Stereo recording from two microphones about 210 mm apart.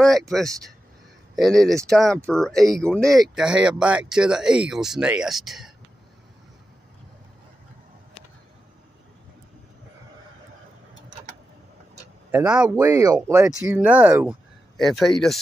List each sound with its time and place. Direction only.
1.3 s speech: centre (ahead or behind)
12.3 s speech: 10° right (ahead or behind)
14.8 s speech: centre (ahead or behind)